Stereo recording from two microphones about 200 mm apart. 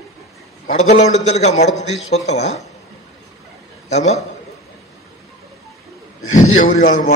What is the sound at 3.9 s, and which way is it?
Speech, 35° left (ahead or behind).